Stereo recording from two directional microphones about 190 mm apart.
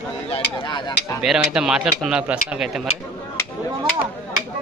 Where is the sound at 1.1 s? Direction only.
5° right (ahead or behind).